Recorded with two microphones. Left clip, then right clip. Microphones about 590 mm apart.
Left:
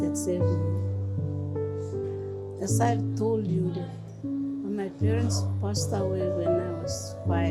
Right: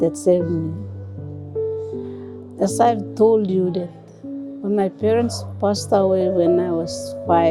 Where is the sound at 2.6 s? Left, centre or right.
Right.